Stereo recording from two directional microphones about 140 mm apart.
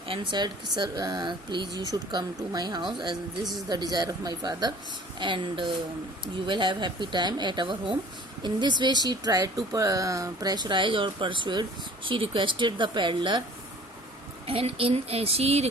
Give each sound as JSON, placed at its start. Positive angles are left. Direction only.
{"t": 0.1, "sound": "speech", "side_deg": -35}
{"t": 14.4, "sound": "speech", "side_deg": -40}